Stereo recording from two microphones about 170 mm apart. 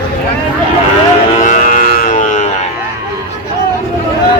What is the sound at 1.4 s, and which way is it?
Music, 50° left (ahead or behind).